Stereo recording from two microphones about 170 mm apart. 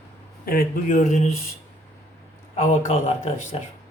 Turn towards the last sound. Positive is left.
turn(degrees=45)  # may be behind; listen again after turning